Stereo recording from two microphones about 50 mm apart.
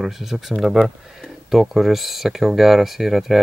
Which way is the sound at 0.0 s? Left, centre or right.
Centre.